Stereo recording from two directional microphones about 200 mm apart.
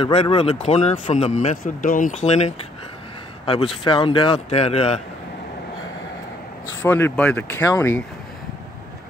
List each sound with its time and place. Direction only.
0.0 s a man's voice: 25° left (ahead or behind)
3.8 s speech: 25° left (ahead or behind)
6.8 s speech: 10° left (ahead or behind)